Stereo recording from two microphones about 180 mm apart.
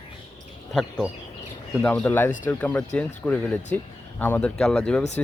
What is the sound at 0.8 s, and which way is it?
A man's voice, centre (ahead or behind).